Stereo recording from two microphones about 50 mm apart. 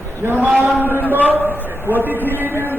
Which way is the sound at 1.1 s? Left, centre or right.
Right.